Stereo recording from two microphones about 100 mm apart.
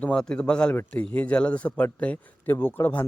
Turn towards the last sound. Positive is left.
turn(degrees=20)  # may be behind; listen again after turning